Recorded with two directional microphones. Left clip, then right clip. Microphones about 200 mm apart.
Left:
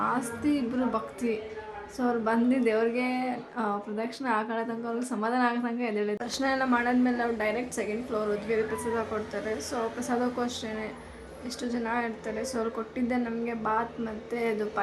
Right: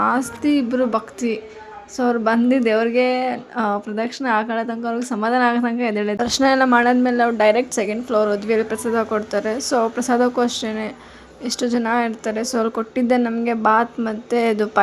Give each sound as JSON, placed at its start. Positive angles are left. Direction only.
{"t": 0.0, "sound": "a woman's voice", "side_deg": -40}